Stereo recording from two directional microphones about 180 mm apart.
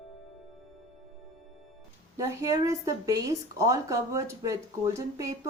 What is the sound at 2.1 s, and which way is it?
A woman's voice, 15° right (ahead or behind).